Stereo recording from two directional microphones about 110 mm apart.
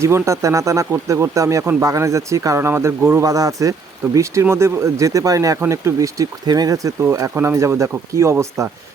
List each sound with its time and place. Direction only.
0.0 s speech: 25° right (ahead or behind)
3.2 s speech: 30° right (ahead or behind)